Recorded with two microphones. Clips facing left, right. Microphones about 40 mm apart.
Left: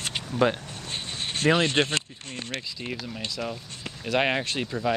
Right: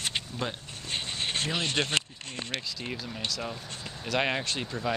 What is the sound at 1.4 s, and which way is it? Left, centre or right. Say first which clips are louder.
Speech: left 16 dB; left.